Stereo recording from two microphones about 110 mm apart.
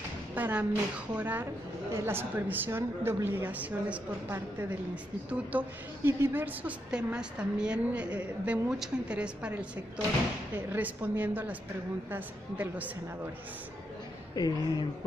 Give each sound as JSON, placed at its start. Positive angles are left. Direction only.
{"t": 0.3, "sound": "a woman's voice", "side_deg": -15}
{"t": 10.7, "sound": "a woman's voice", "side_deg": -15}
{"t": 14.3, "sound": "speech", "side_deg": 35}